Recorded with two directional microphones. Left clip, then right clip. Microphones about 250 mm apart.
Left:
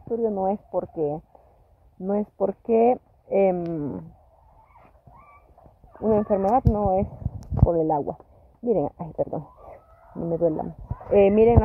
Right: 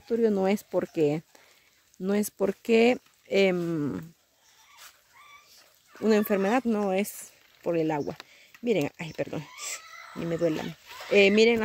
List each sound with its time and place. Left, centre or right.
0.2 s speech: right
2.0 s speech: right
6.0 s speech: right
7.7 s speech: centre